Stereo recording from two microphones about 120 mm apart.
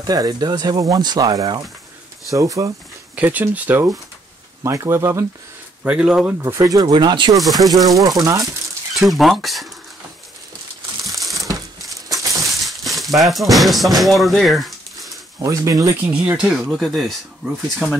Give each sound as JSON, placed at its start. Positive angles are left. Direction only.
{"t": 0.0, "sound": "speech", "side_deg": -30}
{"t": 3.2, "sound": "speech", "side_deg": -15}
{"t": 5.9, "sound": "speech", "side_deg": -10}
{"t": 6.4, "sound": "speech", "side_deg": -25}
{"t": 7.6, "sound": "speech", "side_deg": 0}
{"t": 8.2, "sound": "speech", "side_deg": -25}
{"t": 8.9, "sound": "speech", "side_deg": 0}
{"t": 11.1, "sound": "crumpling", "side_deg": 0}
{"t": 11.9, "sound": "a sound", "side_deg": -30}
{"t": 12.4, "sound": "a sound", "side_deg": 0}
{"t": 13.2, "sound": "speech", "side_deg": 0}
{"t": 15.3, "sound": "speech", "side_deg": -30}
{"t": 16.0, "sound": "speech", "side_deg": -15}